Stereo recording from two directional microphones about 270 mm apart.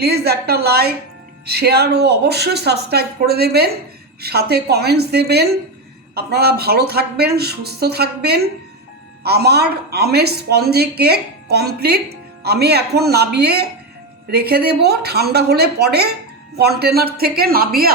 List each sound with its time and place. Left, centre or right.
0.0 s speech: right